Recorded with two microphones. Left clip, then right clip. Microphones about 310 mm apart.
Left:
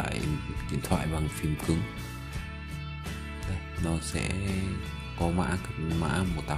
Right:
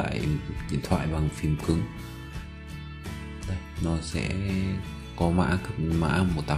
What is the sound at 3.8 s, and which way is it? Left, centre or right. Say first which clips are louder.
Speech: right 2 dB; centre.